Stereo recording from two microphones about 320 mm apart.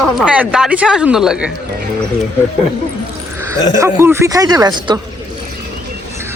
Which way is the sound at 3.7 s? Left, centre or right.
Centre.